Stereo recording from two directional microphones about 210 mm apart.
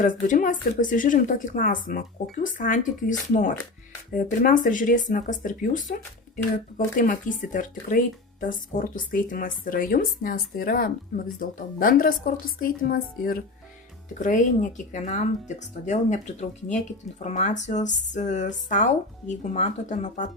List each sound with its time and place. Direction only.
0.0 s a woman's voice: 40° left (ahead or behind)